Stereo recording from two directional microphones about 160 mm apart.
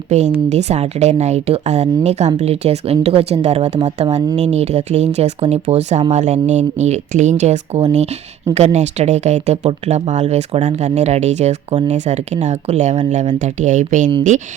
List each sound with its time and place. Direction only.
0.1 s speech: 45° right (ahead or behind)